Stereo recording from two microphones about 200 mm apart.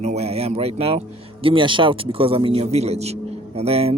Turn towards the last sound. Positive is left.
turn(degrees=-30)  # may be behind; listen again after turning